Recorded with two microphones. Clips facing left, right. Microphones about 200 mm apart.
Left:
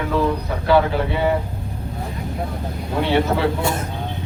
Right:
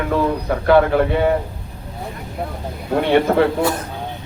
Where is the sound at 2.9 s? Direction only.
50° right (ahead or behind).